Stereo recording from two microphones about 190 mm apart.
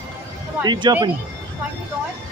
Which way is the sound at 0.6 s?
20° right (ahead or behind).